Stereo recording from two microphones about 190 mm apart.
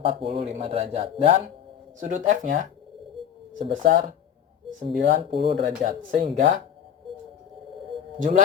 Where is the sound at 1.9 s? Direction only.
40° right (ahead or behind).